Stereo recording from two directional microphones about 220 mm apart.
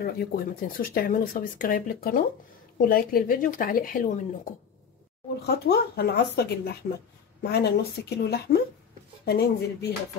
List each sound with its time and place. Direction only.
0.0 s speech: 45° left (ahead or behind)
5.5 s speech: 45° left (ahead or behind)